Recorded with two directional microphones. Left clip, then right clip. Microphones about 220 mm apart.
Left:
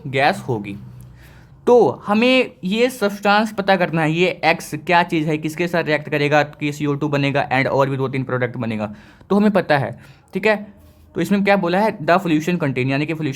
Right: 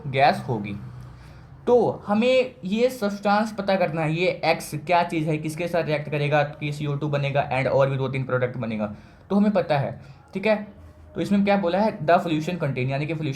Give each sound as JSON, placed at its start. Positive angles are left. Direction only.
{"t": 0.1, "sound": "speech", "side_deg": 35}